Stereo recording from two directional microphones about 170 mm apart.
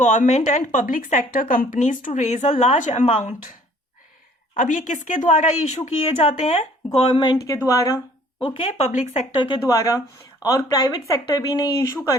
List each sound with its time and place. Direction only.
0.0 s speech: 45° left (ahead or behind)
4.5 s speech: 50° left (ahead or behind)
7.2 s speech: 20° left (ahead or behind)
8.9 s speech: 45° left (ahead or behind)
9.4 s speech: 25° left (ahead or behind)